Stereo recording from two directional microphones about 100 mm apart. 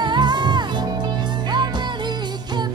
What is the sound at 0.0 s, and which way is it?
Music, 50° right (ahead or behind).